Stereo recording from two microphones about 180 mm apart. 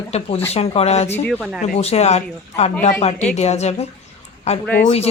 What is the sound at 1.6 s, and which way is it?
Speech, 35° left (ahead or behind).